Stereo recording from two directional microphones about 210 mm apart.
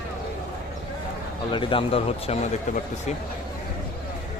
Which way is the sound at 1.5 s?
25° left (ahead or behind).